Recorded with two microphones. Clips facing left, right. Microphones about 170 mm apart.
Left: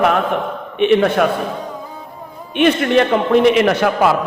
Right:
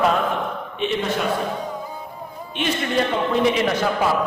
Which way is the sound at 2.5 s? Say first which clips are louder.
Left 10 dB; 60° left (ahead or behind).